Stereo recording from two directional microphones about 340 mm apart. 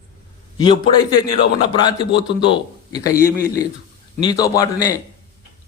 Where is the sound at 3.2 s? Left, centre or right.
Left.